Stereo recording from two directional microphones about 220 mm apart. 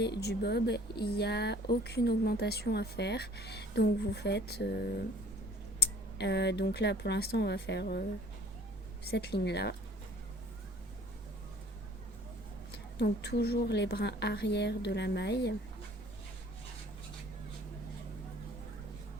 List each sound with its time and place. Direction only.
0.0 s speech: 50° left (ahead or behind)
9.0 s speech: 50° left (ahead or behind)
12.7 s speech: 50° left (ahead or behind)